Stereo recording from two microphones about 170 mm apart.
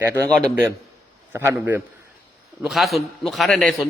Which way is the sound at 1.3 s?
15° right (ahead or behind).